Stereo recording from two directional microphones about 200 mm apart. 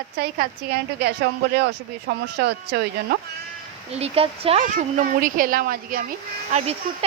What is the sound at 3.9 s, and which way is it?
Speech, 30° right (ahead or behind).